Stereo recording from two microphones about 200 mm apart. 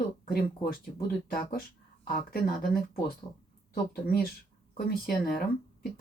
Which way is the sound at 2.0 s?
50° left (ahead or behind).